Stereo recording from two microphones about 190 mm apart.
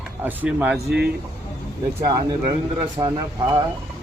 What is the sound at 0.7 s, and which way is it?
Speech, 60° right (ahead or behind).